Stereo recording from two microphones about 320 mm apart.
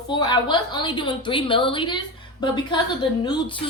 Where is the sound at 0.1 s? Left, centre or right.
Centre.